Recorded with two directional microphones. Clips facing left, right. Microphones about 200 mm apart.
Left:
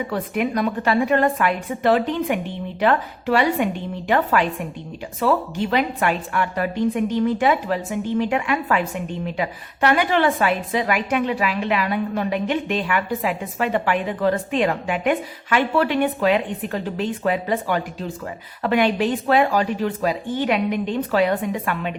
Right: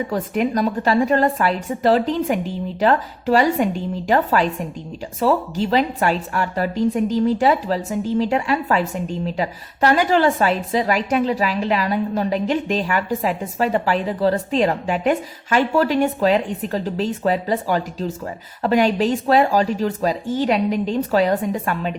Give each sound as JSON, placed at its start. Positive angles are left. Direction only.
{"t": 0.1, "sound": "a woman's voice", "side_deg": -40}